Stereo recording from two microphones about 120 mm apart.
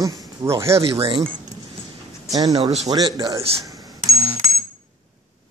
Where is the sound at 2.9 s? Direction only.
30° right (ahead or behind).